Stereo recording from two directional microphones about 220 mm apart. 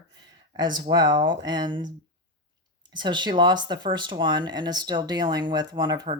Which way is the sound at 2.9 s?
20° right (ahead or behind).